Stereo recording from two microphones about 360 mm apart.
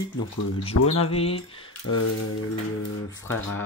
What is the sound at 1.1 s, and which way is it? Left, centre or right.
Speech, centre.